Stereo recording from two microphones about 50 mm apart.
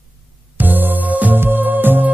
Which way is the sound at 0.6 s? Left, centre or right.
Right.